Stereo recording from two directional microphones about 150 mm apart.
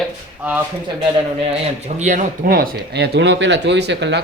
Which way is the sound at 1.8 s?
50° right (ahead or behind).